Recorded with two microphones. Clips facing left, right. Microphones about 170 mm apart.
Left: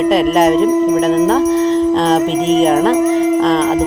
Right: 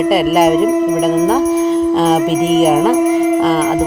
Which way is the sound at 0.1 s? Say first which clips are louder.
Right 1 dB; 5° right (ahead or behind).